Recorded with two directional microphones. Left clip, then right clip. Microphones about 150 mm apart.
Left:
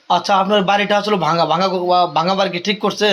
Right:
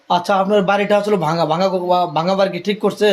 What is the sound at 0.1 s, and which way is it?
A woman's voice, 30° right (ahead or behind).